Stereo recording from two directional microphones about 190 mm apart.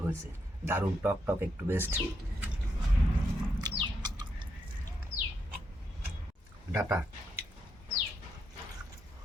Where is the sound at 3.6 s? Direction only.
25° right (ahead or behind).